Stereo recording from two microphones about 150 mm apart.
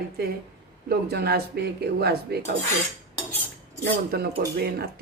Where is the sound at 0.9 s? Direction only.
90° right.